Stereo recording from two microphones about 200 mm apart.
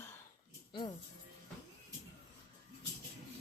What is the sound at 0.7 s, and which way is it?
Music, 20° left (ahead or behind).